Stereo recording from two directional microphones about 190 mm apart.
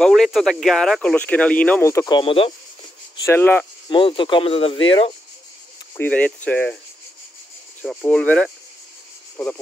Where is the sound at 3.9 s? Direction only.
25° left (ahead or behind).